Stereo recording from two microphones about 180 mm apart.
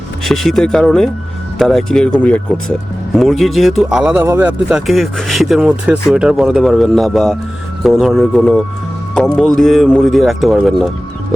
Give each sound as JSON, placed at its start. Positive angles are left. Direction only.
{"t": 0.3, "sound": "speech", "side_deg": 0}